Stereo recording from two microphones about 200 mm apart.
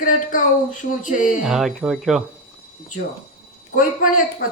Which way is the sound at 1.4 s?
Centre (ahead or behind).